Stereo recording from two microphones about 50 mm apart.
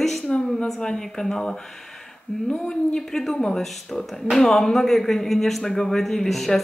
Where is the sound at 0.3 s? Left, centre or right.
Centre.